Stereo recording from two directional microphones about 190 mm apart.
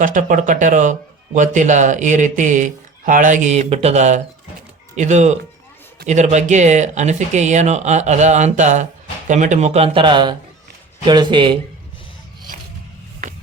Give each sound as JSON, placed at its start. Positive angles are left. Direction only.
{"t": 0.0, "sound": "speech", "side_deg": -45}